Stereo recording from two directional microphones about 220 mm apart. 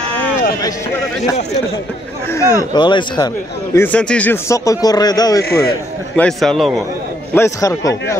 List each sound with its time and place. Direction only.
2.3 s speech: 15° left (ahead or behind)
3.7 s a man's voice: 5° left (ahead or behind)
6.1 s speech: centre (ahead or behind)
7.3 s a man's voice: 15° left (ahead or behind)